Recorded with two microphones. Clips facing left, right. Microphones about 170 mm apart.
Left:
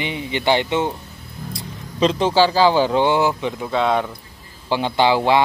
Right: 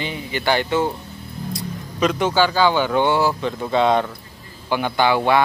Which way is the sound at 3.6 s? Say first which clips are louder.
Right 3 dB; centre (ahead or behind).